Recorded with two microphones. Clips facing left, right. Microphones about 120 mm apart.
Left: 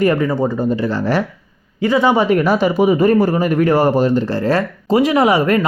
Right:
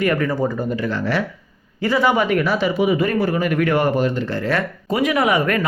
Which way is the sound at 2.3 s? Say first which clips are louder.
Left 5 dB; 45° left (ahead or behind).